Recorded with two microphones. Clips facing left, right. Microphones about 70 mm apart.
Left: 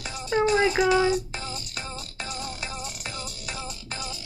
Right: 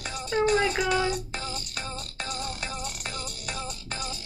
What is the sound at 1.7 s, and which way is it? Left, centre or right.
Music, right.